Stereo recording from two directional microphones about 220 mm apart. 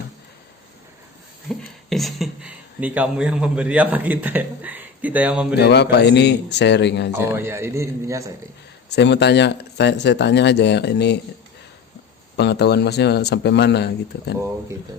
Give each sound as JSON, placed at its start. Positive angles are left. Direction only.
{"t": 1.5, "sound": "speech", "side_deg": 0}
{"t": 5.5, "sound": "speech", "side_deg": 50}
{"t": 7.1, "sound": "a man's voice", "side_deg": -10}
{"t": 8.9, "sound": "speech", "side_deg": 50}
{"t": 12.4, "sound": "speech", "side_deg": 50}